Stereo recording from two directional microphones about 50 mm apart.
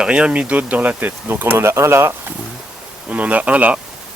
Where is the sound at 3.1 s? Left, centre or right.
Right.